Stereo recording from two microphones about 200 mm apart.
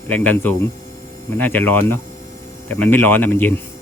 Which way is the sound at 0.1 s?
10° left (ahead or behind).